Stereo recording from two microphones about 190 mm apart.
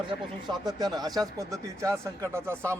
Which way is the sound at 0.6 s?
20° right (ahead or behind).